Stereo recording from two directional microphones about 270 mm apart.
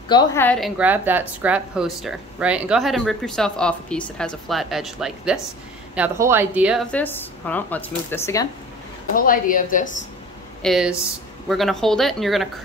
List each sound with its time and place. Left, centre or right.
0.1 s a woman's voice: centre
9.1 s a woman's voice: left
10.6 s a woman's voice: centre